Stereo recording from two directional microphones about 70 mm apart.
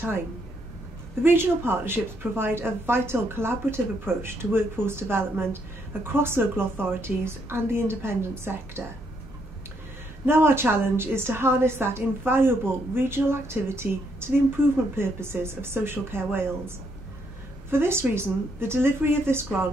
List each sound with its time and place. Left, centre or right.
1.2 s a woman's voice: right
10.2 s a woman's voice: right